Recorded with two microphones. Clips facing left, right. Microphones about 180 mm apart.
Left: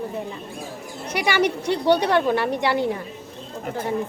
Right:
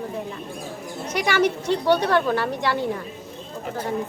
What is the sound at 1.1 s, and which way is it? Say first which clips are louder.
A woman's voice: even; 10° left (ahead or behind).